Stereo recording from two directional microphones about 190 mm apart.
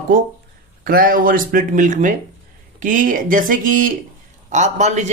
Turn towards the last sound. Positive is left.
turn(degrees=-40)  # may be behind; listen again after turning